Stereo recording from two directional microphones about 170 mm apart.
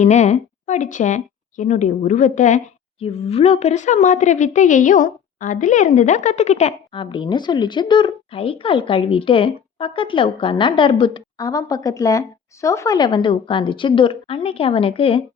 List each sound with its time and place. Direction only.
0.0 s a woman's voice: 40° left (ahead or behind)
3.0 s a woman's voice: 35° left (ahead or behind)